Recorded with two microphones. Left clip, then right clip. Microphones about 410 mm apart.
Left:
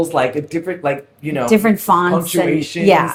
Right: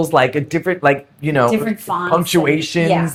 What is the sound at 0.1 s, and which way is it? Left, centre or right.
Speech, right.